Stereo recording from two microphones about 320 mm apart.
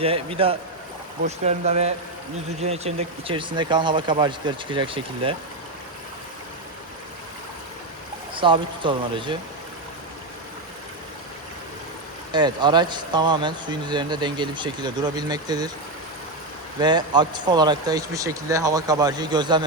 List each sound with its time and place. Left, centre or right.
0.0 s speech: centre
8.4 s speech: centre
12.3 s speech: centre
16.8 s speech: centre